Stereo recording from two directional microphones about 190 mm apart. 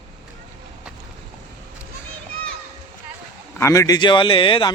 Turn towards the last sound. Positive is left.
turn(degrees=25)  # may be behind; listen again after turning